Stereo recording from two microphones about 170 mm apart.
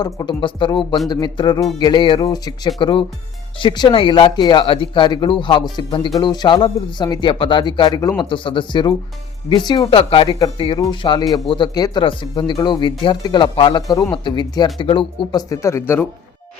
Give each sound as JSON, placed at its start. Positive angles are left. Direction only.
{"t": 0.0, "sound": "speech", "side_deg": 25}
{"t": 11.3, "sound": "speech", "side_deg": 0}
{"t": 11.5, "sound": "speech", "side_deg": 25}